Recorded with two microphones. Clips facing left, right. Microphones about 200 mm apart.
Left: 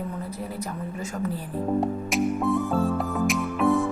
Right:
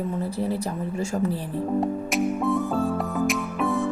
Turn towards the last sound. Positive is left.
turn(degrees=0)  # may be behind; listen again after turning